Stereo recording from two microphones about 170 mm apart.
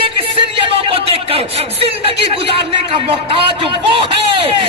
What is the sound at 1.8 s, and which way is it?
A man's voice, 35° right (ahead or behind).